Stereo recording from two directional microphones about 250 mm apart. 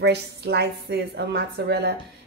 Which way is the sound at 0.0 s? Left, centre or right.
Right.